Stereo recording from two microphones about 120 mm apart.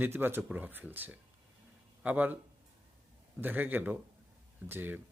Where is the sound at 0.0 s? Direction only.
20° right (ahead or behind).